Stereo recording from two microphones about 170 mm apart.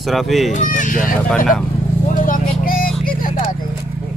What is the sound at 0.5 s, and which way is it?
Speech, 50° left (ahead or behind).